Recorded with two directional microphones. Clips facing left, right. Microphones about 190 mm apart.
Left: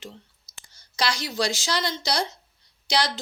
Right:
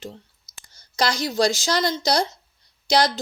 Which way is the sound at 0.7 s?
45° right (ahead or behind).